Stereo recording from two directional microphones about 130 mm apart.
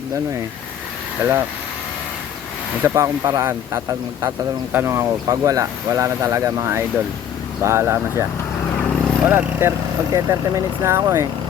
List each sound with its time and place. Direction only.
1.2 s speech: 20° right (ahead or behind)
2.8 s speech: 20° right (ahead or behind)